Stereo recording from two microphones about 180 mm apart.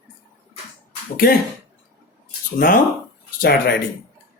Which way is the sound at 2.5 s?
55° left (ahead or behind).